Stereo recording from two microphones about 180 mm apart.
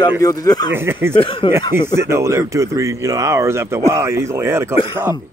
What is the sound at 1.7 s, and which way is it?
Speech, 15° right (ahead or behind).